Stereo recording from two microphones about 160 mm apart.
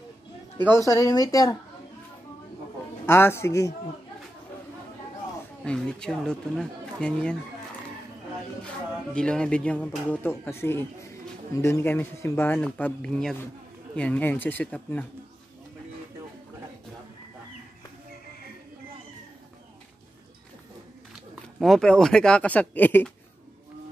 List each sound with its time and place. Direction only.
0.7 s speech: 20° left (ahead or behind)
3.1 s speech: 15° left (ahead or behind)
5.6 s speech: 5° left (ahead or behind)
9.1 s speech: 5° left (ahead or behind)
21.1 s speech: centre (ahead or behind)